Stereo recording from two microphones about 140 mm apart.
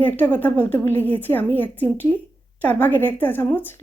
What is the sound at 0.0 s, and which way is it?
A woman's voice, 10° left (ahead or behind).